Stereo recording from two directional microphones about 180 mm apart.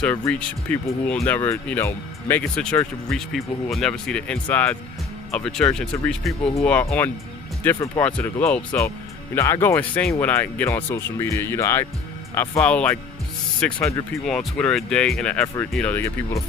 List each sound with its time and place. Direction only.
0.0 s speech: 5° left (ahead or behind)
7.6 s speech: 15° left (ahead or behind)